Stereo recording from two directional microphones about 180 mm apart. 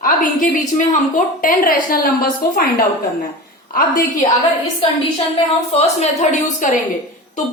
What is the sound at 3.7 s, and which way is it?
Speech, 50° left (ahead or behind).